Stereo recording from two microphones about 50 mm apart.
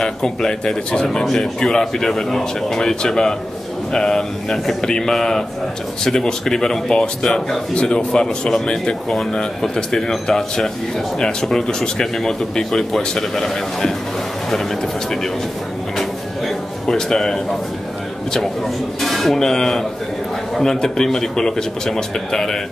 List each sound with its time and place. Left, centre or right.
0.0 s a man's voice: centre
7.7 s a man's voice: centre
16.0 s drawer open or close: centre
18.9 s a man's voice: centre